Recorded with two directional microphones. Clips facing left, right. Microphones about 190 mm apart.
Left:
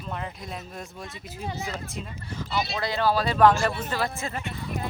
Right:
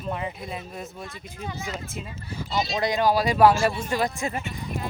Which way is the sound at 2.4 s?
20° right (ahead or behind).